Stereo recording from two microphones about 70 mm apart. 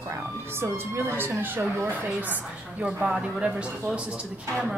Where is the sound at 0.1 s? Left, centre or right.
Right.